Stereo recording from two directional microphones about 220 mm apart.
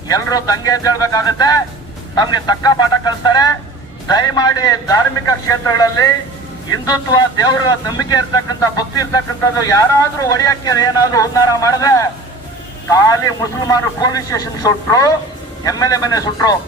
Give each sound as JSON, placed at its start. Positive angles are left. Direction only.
{"t": 0.1, "sound": "speech", "side_deg": 15}